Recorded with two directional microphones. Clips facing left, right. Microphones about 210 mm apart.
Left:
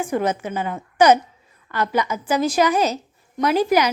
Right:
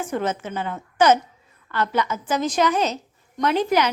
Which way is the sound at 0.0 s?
10° left (ahead or behind).